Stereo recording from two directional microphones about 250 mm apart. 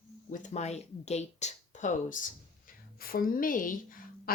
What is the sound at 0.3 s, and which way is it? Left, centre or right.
Speech, left.